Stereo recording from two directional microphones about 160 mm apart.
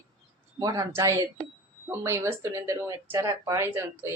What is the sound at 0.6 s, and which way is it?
A woman's voice, 20° right (ahead or behind).